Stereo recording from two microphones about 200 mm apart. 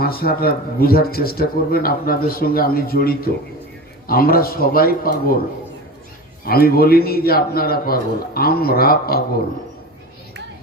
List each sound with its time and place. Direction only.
0.0 s a man's voice: 50° left (ahead or behind)
6.4 s a man's voice: 50° left (ahead or behind)